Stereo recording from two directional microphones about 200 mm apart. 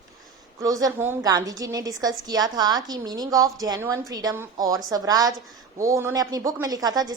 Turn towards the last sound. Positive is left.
turn(degrees=-20)  # may be behind; listen again after turning